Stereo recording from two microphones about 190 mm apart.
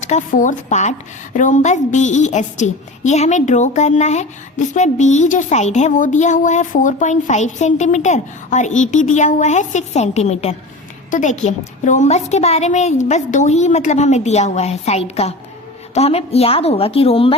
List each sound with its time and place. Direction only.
0.0 s speech: 40° left (ahead or behind)